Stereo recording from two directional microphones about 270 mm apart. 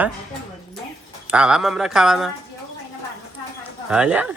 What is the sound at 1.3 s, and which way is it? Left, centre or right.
Speech, centre.